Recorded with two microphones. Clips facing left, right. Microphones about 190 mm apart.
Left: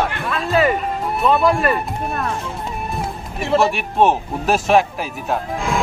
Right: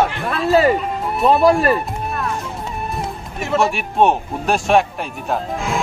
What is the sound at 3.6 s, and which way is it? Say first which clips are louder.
Speech: right 2 dB; centre (ahead or behind).